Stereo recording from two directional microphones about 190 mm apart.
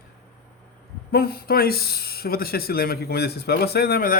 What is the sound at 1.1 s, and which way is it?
Speech, 50° left (ahead or behind).